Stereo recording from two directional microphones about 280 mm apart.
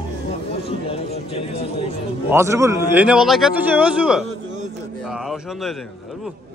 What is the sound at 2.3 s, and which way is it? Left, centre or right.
A man's voice, centre.